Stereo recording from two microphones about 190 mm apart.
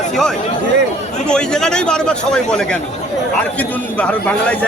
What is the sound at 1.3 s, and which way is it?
A man's voice, 5° left (ahead or behind).